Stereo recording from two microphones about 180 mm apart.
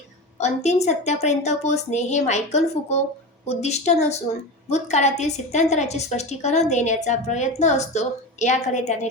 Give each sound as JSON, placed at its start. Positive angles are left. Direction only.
{"t": 0.3, "sound": "a woman's voice", "side_deg": 40}